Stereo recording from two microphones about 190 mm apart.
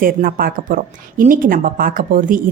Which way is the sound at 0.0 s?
50° right (ahead or behind).